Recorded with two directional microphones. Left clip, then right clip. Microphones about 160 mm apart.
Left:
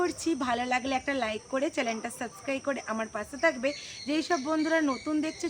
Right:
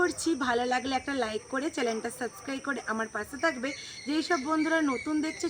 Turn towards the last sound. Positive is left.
turn(degrees=20)  # may be behind; listen again after turning